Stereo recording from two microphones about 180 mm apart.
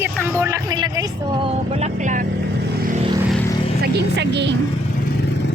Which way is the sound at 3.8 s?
70° right (ahead or behind).